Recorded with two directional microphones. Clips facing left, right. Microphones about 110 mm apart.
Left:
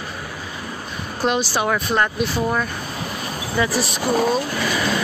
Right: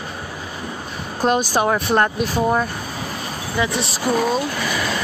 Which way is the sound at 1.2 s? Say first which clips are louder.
Right 2 dB; 40° right (ahead or behind).